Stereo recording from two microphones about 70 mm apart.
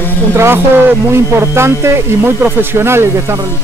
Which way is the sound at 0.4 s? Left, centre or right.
Right.